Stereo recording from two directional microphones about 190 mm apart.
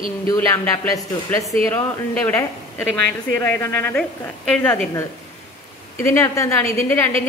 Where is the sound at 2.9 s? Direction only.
10° left (ahead or behind).